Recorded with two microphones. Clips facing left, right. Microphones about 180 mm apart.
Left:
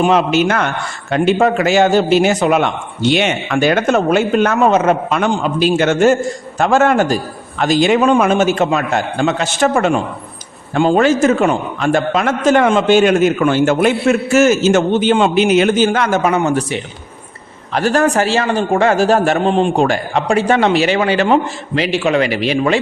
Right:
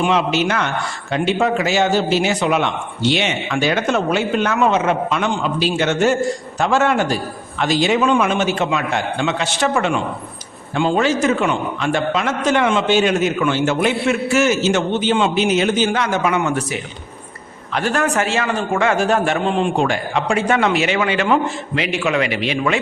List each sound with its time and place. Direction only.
0.0 s a man's voice: 45° left (ahead or behind)